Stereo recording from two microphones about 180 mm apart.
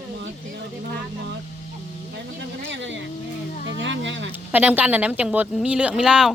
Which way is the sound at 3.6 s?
90° right.